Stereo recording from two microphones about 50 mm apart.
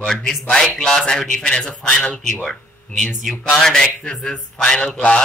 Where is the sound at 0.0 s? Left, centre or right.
Centre.